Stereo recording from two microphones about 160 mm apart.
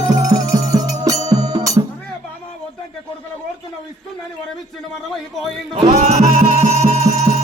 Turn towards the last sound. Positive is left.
turn(degrees=-45)  # may be behind; listen again after turning